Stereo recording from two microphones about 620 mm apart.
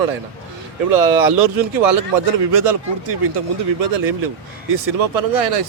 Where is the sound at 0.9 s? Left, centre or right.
Right.